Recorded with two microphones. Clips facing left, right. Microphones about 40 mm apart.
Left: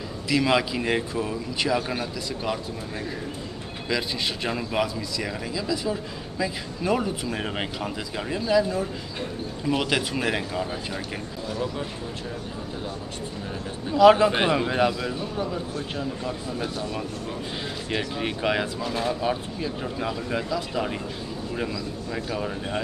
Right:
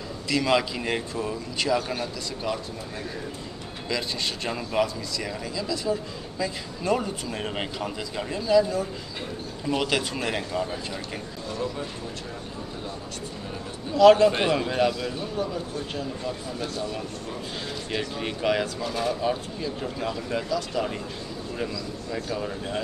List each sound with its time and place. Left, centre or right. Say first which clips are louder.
0.3 s speech: left 1 dB; centre
3.9 s speech: left 2 dB; centre
13.9 s speech: even; centre
22.1 s speech: even; centre